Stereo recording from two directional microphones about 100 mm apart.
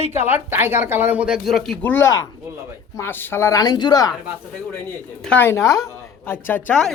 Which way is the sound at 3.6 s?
45° left (ahead or behind).